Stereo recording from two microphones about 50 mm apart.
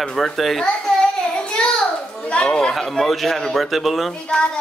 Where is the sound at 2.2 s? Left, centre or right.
Centre.